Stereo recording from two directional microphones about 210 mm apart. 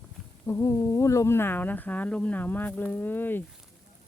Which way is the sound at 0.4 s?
15° left (ahead or behind).